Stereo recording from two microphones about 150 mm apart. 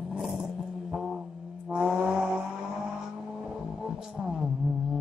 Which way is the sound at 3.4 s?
5° right (ahead or behind).